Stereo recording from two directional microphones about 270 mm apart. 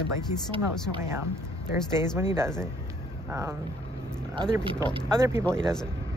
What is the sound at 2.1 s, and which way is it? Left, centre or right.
Speech, centre.